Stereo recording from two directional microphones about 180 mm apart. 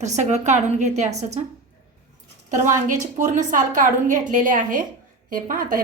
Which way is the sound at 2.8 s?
45° right (ahead or behind).